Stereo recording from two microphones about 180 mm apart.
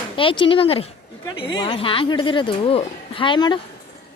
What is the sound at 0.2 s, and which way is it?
Speech, 30° left (ahead or behind).